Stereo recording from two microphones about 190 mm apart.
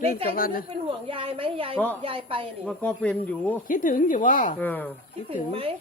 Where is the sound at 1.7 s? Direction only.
10° left (ahead or behind).